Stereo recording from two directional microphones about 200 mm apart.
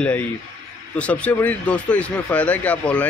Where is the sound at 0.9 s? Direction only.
5° left (ahead or behind).